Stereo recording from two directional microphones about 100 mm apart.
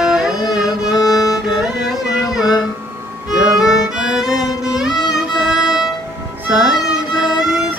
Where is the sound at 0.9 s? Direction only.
35° left (ahead or behind).